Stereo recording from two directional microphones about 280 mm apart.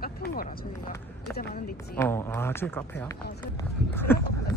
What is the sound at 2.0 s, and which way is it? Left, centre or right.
Speech, centre.